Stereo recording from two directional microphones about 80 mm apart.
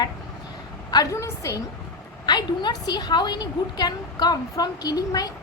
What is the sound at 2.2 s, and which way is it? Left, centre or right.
A woman's voice, left.